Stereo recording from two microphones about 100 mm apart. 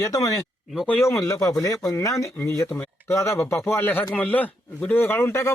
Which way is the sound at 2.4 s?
20° left (ahead or behind).